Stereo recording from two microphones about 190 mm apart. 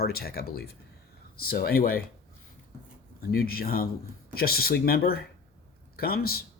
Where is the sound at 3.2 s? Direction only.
50° left (ahead or behind).